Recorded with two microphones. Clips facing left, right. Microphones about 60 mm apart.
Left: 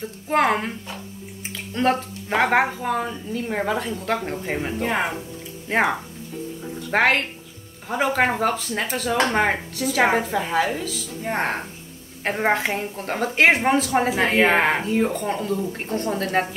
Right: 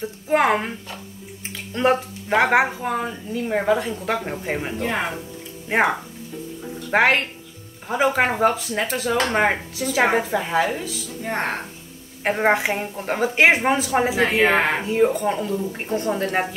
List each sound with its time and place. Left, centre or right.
0.0 s a woman's voice: centre
1.8 s a woman's voice: centre
4.7 s speech: centre
5.7 s a woman's voice: centre
12.2 s a woman's voice: centre